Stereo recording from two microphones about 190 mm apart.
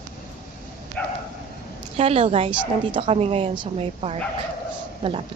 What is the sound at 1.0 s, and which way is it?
Bow-wow, 5° left (ahead or behind).